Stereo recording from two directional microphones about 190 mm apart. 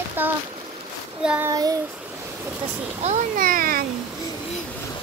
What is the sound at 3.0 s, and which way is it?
Speech, 35° right (ahead or behind).